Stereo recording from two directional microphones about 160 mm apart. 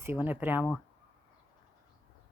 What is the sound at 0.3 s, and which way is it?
Speech, 10° right (ahead or behind).